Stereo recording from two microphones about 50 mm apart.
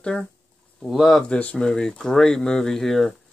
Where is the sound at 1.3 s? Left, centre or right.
Left; by 3.1 s centre.